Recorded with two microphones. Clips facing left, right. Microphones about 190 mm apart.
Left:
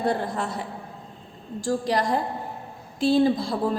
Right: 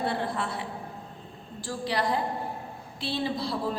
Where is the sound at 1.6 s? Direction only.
45° left (ahead or behind).